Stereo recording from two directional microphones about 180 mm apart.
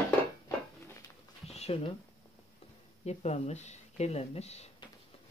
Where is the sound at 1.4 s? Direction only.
35° left (ahead or behind).